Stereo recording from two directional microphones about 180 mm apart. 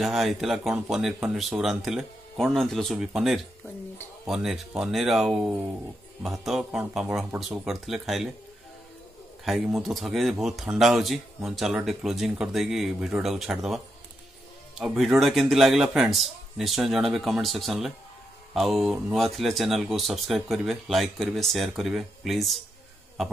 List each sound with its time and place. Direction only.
0.0 s speech: centre (ahead or behind)
9.4 s speech: centre (ahead or behind)
14.8 s speech: centre (ahead or behind)